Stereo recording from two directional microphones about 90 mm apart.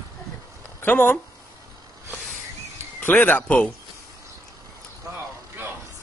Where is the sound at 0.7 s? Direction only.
25° left (ahead or behind).